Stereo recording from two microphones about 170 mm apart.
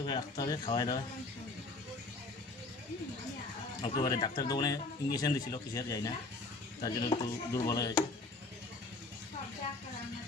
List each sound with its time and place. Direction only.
0.0 s speech: 25° left (ahead or behind)
3.9 s speech: 20° left (ahead or behind)